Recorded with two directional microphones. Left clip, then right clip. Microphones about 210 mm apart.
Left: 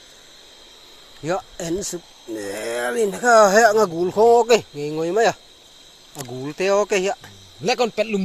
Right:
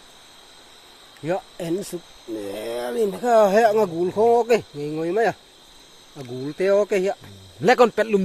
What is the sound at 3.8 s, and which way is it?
Speech, 15° left (ahead or behind).